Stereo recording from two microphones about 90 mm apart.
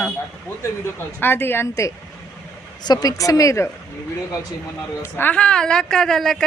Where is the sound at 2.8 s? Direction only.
45° left (ahead or behind).